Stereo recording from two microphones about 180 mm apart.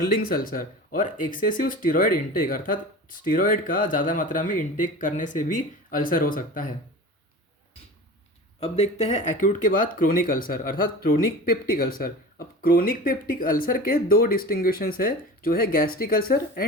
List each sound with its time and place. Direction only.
0.1 s speech: 50° left (ahead or behind)
8.6 s speech: 35° left (ahead or behind); by 16.6 s 55° left (ahead or behind)